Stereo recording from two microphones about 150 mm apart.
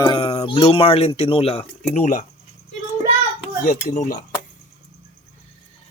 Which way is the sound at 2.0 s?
55° left (ahead or behind).